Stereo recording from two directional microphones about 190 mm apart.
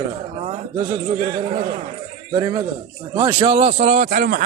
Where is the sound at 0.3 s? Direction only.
35° right (ahead or behind).